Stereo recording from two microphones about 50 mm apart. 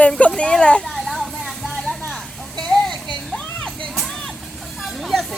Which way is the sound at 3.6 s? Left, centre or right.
Centre.